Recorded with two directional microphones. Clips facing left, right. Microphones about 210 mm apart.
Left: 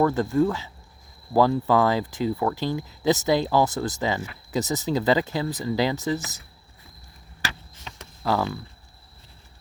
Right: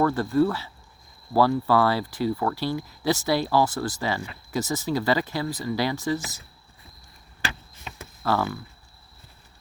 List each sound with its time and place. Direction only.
0.0 s speech: 20° left (ahead or behind)
8.2 s speech: 15° left (ahead or behind)